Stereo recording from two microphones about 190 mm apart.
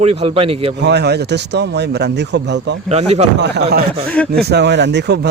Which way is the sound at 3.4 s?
60° right (ahead or behind).